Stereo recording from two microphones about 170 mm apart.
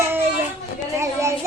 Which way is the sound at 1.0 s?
15° right (ahead or behind).